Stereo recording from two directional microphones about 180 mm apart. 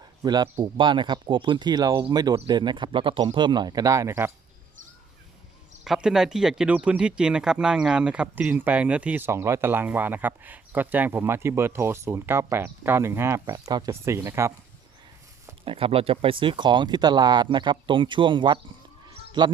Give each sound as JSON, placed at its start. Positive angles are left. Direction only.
{"t": 0.2, "sound": "speech", "side_deg": -25}
{"t": 5.8, "sound": "speech", "side_deg": 0}
{"t": 15.6, "sound": "speech", "side_deg": -30}
{"t": 19.0, "sound": "a sound", "side_deg": -25}